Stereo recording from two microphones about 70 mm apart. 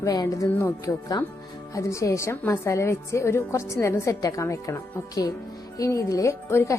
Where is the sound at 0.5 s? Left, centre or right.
Left.